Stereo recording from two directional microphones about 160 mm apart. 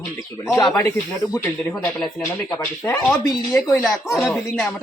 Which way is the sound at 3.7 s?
Centre (ahead or behind).